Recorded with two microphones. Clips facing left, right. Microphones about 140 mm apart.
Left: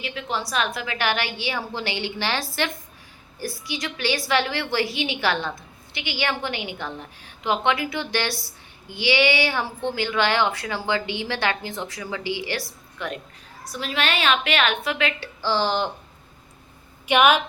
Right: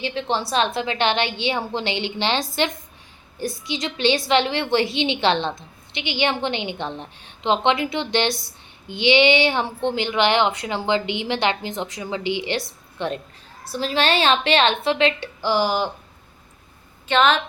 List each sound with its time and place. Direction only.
0.0 s a woman's voice: 30° right (ahead or behind); by 15.9 s 10° right (ahead or behind)
17.1 s a woman's voice: 10° left (ahead or behind)